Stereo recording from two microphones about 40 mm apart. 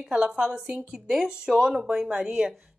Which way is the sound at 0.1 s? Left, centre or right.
Right.